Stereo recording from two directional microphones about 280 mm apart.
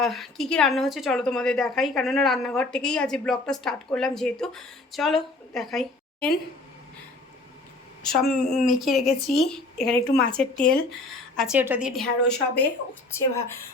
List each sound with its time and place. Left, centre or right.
0.0 s a woman's voice: centre
8.3 s a woman's voice: centre